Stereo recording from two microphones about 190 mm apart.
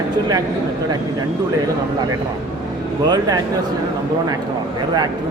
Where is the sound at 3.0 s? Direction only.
20° right (ahead or behind).